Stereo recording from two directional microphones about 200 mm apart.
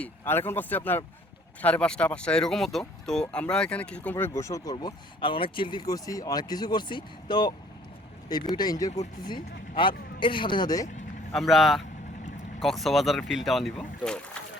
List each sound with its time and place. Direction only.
0.0 s speech: 10° left (ahead or behind)
8.5 s speech: 20° left (ahead or behind)
11.3 s speech: centre (ahead or behind)